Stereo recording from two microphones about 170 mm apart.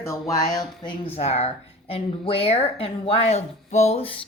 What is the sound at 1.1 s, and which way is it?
A woman's voice, 35° left (ahead or behind).